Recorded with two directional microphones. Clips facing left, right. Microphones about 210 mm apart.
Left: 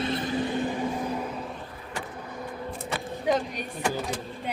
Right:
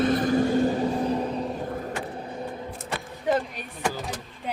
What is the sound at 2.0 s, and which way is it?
Vehicle, 30° right (ahead or behind).